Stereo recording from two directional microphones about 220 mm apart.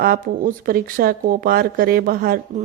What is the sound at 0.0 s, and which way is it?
A woman's voice, 40° right (ahead or behind).